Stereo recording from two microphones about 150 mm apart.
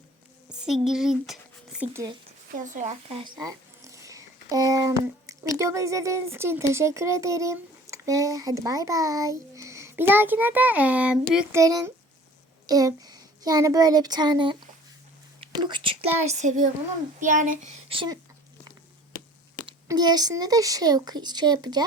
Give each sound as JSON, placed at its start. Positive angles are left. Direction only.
{"t": 0.5, "sound": "a sound", "side_deg": -5}
{"t": 0.9, "sound": "speech", "side_deg": 0}
{"t": 1.9, "sound": "speech", "side_deg": -20}
{"t": 2.6, "sound": "a child's voice", "side_deg": -55}
{"t": 3.1, "sound": "speech", "side_deg": -40}
{"t": 4.0, "sound": "speech", "side_deg": -20}
{"t": 11.5, "sound": "speech", "side_deg": -25}
{"t": 15.5, "sound": "a child's voice", "side_deg": -30}
{"t": 17.8, "sound": "speech", "side_deg": -35}
{"t": 19.9, "sound": "speech", "side_deg": -25}